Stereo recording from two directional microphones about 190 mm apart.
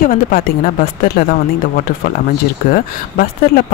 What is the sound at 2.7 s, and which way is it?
Speech, 50° left (ahead or behind).